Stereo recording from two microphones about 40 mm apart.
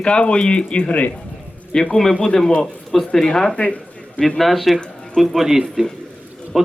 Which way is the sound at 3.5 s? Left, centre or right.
Left.